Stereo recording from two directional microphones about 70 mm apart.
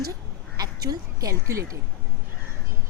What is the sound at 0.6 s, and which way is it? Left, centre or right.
Quack, right.